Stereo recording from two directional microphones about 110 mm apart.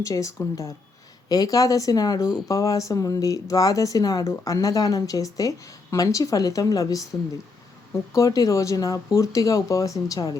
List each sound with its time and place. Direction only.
0.0 s speech: 30° left (ahead or behind)